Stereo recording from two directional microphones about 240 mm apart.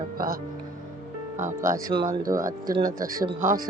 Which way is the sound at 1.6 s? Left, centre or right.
Centre.